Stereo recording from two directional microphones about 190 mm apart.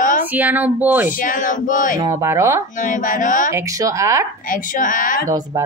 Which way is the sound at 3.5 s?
15° right (ahead or behind).